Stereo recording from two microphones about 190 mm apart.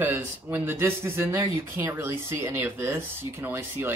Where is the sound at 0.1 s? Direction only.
10° right (ahead or behind).